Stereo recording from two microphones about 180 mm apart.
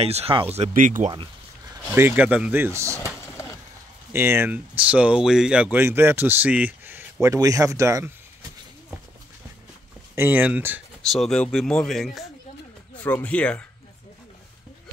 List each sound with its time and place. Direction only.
0.0 s speech: 35° right (ahead or behind)
2.0 s speech: 10° right (ahead or behind)
4.1 s speech: 15° right (ahead or behind)
10.1 s speech: 10° right (ahead or behind)
11.1 s speech: centre (ahead or behind)